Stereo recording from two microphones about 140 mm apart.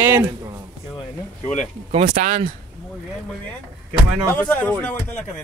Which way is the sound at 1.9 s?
50° right (ahead or behind).